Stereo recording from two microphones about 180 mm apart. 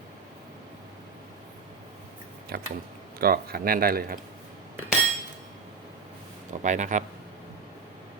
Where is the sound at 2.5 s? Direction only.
60° right (ahead or behind).